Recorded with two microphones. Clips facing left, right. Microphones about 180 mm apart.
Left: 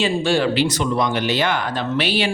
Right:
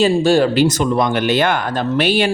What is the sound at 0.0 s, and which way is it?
Speech, 40° right (ahead or behind).